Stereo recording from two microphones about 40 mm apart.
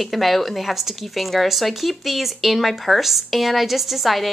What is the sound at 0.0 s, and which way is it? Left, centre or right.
A woman's voice, centre.